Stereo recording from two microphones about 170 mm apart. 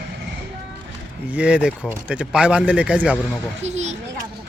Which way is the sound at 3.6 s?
40° right (ahead or behind).